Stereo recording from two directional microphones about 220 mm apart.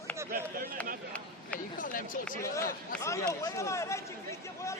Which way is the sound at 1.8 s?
40° left (ahead or behind).